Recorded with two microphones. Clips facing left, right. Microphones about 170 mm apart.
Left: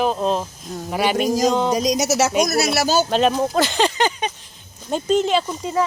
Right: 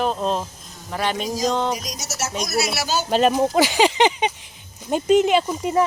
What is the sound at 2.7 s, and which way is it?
Speech, 40° left (ahead or behind).